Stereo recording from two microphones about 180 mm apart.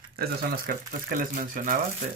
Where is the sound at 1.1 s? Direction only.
50° right (ahead or behind).